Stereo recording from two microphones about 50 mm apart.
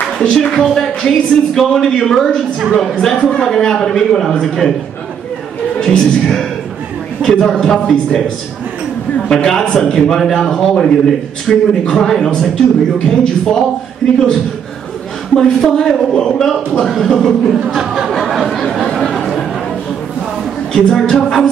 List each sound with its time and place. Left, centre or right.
0.3 s a man's voice: centre
3.2 s a man's voice: centre
5.8 s a man's voice: centre
9.3 s a man's voice: centre
15.3 s a man's voice: centre
17.7 s a sound: centre
18.9 s chatter: centre
20.7 s a man's voice: centre